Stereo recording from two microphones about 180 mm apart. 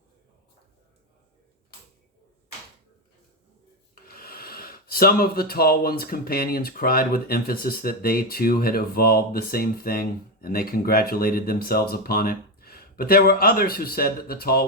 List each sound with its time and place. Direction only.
4.1 s speech: 55° left (ahead or behind)